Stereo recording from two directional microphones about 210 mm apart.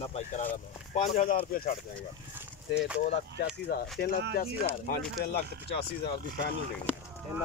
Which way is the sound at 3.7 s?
45° left (ahead or behind).